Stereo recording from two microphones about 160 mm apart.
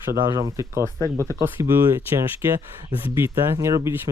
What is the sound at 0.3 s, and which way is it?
Speech, 20° right (ahead or behind).